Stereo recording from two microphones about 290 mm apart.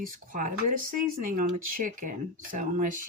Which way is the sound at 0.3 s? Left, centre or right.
Right.